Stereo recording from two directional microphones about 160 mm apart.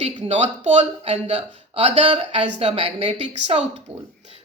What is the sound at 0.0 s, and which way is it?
A woman's voice, 40° right (ahead or behind).